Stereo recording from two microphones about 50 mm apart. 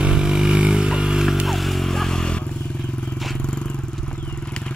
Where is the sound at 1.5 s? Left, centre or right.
Centre.